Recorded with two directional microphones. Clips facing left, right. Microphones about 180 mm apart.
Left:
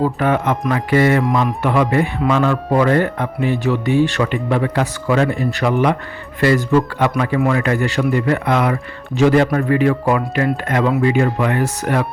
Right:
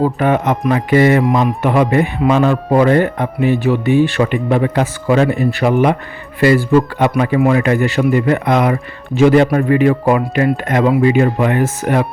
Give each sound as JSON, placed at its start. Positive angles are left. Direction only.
{"t": 0.0, "sound": "speech", "side_deg": -20}
{"t": 7.2, "sound": "speech", "side_deg": -15}